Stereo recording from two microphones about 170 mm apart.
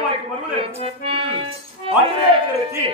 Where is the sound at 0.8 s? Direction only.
35° right (ahead or behind).